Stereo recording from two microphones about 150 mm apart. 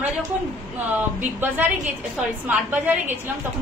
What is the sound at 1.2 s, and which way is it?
A woman's voice, 10° right (ahead or behind).